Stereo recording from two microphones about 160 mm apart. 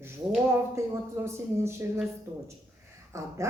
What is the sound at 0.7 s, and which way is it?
Speech, 15° right (ahead or behind).